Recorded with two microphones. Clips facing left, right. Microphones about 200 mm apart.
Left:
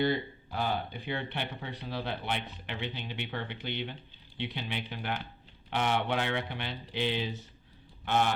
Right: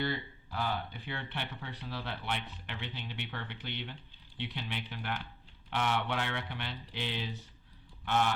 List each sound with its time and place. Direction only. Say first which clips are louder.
0.0 s speech: left 6 dB; 20° left (ahead or behind)